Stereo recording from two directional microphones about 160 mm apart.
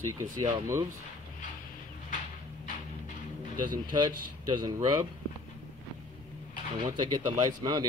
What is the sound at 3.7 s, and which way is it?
Speech, 30° right (ahead or behind).